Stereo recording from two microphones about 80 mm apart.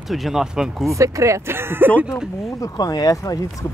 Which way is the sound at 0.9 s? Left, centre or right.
Right.